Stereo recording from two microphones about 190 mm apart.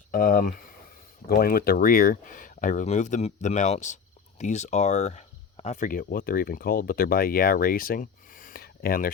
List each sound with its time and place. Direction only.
0.1 s speech: 50° left (ahead or behind)